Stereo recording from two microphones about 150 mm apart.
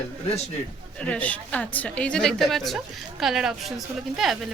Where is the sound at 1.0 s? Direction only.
10° left (ahead or behind).